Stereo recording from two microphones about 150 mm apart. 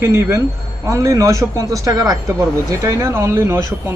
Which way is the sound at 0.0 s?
15° right (ahead or behind).